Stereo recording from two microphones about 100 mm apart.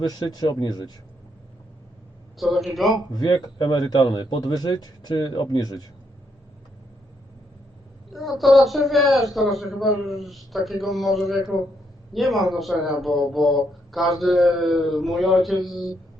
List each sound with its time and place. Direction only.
0.0 s speech: 40° left (ahead or behind)
2.4 s speech: centre (ahead or behind)
3.1 s speech: 45° left (ahead or behind)
8.1 s speech: centre (ahead or behind)